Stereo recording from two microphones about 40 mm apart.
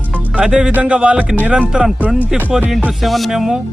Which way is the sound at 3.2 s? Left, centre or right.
Centre.